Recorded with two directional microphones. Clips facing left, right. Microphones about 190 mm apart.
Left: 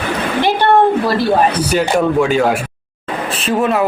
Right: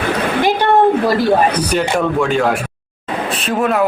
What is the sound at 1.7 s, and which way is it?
Speech, 5° left (ahead or behind).